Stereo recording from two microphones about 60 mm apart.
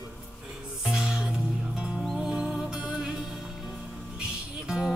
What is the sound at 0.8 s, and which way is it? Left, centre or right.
Music, centre.